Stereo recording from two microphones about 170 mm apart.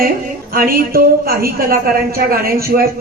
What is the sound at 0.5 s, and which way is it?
A man's voice, 60° right (ahead or behind).